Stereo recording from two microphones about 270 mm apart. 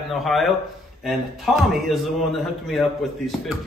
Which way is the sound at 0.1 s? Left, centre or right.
Centre.